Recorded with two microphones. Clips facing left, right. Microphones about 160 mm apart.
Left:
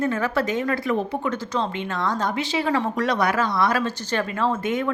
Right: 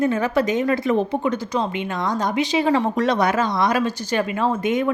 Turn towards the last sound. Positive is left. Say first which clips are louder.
# right 3 dB
turn(degrees=-15)  # may be behind; listen again after turning